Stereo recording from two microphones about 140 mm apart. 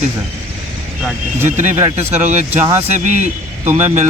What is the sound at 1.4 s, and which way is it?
Speech, 60° right (ahead or behind).